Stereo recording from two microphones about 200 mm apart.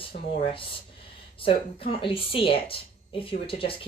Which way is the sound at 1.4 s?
30° left (ahead or behind).